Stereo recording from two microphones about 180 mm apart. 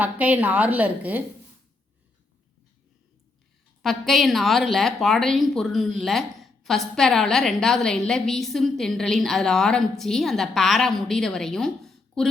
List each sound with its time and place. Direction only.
0.0 s a woman's voice: 10° right (ahead or behind)
3.8 s a woman's voice: centre (ahead or behind)